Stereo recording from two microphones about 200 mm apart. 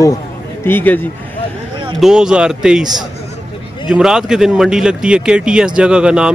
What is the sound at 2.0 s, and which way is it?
Speech, 5° right (ahead or behind).